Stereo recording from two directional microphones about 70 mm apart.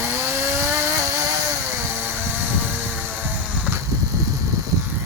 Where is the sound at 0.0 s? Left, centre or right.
Right.